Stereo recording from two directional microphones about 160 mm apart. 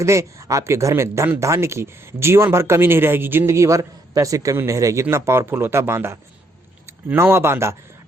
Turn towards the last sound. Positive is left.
turn(degrees=-15)  # may be behind; listen again after turning